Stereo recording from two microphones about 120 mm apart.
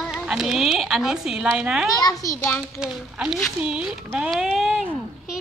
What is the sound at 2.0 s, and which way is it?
Speech, 30° left (ahead or behind).